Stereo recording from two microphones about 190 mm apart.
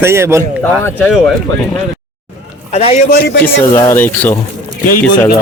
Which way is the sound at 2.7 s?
35° left (ahead or behind).